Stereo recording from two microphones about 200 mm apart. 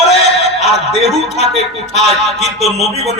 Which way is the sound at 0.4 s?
30° left (ahead or behind).